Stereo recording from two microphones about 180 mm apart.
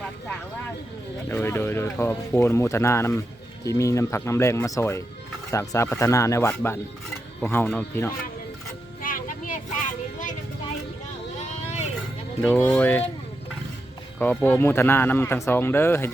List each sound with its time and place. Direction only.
1.3 s speech: 10° left (ahead or behind)
9.0 s vehicle: 50° left (ahead or behind)
11.3 s vehicle: 40° left (ahead or behind)
12.4 s speech: 10° left (ahead or behind)
14.2 s speech: 10° left (ahead or behind)